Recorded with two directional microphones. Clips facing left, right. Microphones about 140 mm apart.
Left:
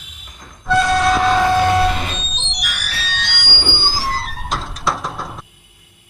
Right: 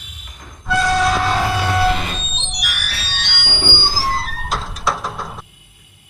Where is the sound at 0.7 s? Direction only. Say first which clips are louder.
Left 2 dB; centre (ahead or behind).